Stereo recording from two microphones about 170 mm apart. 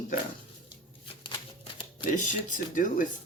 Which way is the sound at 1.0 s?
30° left (ahead or behind).